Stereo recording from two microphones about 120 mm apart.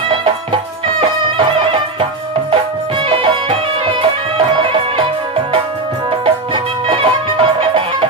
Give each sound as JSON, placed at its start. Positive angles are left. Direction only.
{"t": 0.9, "sound": "music", "side_deg": -45}
{"t": 3.1, "sound": "music", "side_deg": -45}
{"t": 4.4, "sound": "music", "side_deg": -45}
{"t": 6.1, "sound": "music", "side_deg": -45}